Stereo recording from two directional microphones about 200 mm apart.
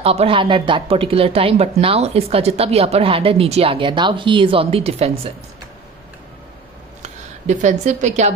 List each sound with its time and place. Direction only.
0.0 s speech: 30° right (ahead or behind)
7.0 s speech: 35° right (ahead or behind)